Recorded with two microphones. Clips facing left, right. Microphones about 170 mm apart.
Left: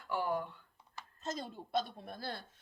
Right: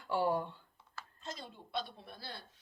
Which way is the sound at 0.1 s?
30° right (ahead or behind).